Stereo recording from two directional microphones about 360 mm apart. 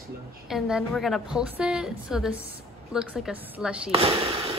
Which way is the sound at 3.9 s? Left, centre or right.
Centre.